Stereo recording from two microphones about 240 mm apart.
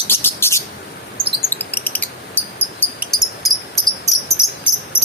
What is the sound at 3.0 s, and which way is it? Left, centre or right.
Cricket, centre.